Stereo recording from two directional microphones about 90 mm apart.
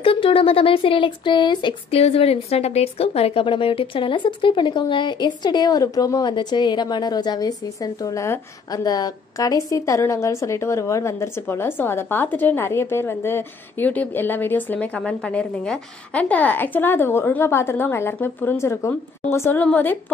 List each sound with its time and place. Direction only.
0.0 s speech: 85° left
3.0 s speech: 85° left; by 6.2 s 40° left (ahead or behind)
6.2 s a woman's voice: 55° left (ahead or behind); by 20.0 s 20° left (ahead or behind)